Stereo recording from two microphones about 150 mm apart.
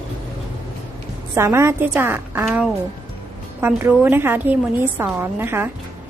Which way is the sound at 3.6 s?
15° right (ahead or behind).